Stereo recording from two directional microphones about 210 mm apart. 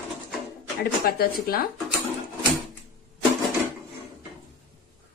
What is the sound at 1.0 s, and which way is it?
Speech, 45° left (ahead or behind).